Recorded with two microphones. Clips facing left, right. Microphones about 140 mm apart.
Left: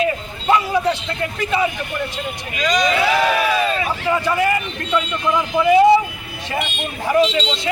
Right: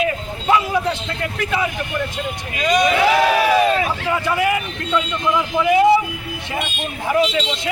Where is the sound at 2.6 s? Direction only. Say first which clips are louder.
Right 2 dB; 55° right (ahead or behind).